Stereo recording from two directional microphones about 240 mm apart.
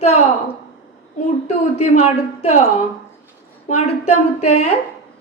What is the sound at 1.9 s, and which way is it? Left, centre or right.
Speech, left.